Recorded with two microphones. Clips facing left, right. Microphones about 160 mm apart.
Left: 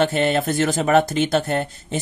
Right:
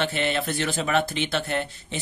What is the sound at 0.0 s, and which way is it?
Speech, 45° left (ahead or behind).